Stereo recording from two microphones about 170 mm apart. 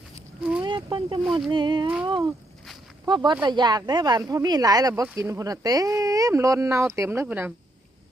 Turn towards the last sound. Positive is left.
turn(degrees=-10)  # may be behind; listen again after turning